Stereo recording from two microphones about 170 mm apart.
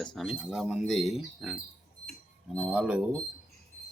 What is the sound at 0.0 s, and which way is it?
Speech, 5° left (ahead or behind).